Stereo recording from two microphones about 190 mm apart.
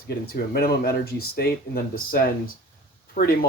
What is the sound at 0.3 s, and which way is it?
Speech, 55° left (ahead or behind).